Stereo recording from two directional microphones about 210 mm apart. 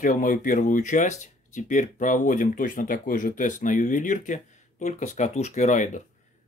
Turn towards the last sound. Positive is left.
turn(degrees=35)  # may be behind; listen again after turning